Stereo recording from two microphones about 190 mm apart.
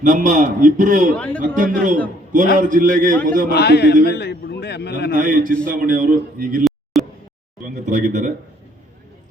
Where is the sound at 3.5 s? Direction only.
60° left (ahead or behind).